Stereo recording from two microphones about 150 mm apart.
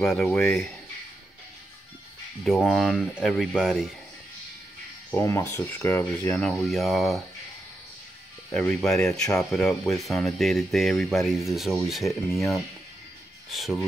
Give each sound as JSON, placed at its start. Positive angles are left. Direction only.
{"t": 0.0, "sound": "speech", "side_deg": 0}
{"t": 2.4, "sound": "speech", "side_deg": 0}
{"t": 5.1, "sound": "speech", "side_deg": 20}
{"t": 6.4, "sound": "speech", "side_deg": 0}
{"t": 8.8, "sound": "speech", "side_deg": 5}
{"t": 12.3, "sound": "speech", "side_deg": 20}
{"t": 13.5, "sound": "speech", "side_deg": 0}